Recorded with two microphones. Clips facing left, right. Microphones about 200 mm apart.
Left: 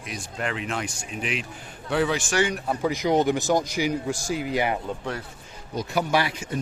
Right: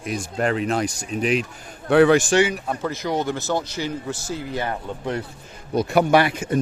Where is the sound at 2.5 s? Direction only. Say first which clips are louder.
Right 1 dB; centre (ahead or behind).